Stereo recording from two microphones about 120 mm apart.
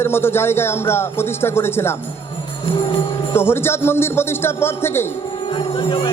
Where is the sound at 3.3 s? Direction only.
20° left (ahead or behind).